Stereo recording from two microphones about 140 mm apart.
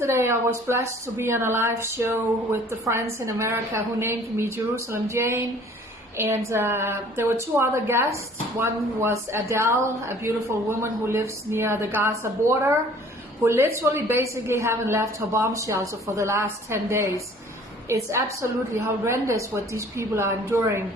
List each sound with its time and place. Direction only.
0.0 s a woman's voice: 20° right (ahead or behind)